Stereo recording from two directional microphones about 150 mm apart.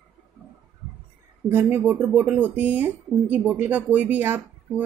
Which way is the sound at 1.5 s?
10° right (ahead or behind).